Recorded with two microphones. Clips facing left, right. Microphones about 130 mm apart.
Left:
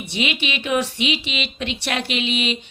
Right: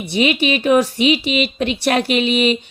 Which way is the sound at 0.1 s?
40° right (ahead or behind).